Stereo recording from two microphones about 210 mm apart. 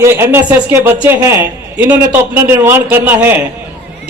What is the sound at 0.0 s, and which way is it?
A man's voice, 10° right (ahead or behind).